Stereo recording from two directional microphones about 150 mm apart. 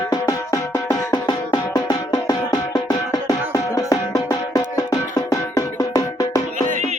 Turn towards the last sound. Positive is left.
turn(degrees=25)  # may be behind; listen again after turning